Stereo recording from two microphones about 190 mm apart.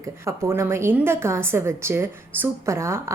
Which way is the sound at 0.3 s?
15° right (ahead or behind).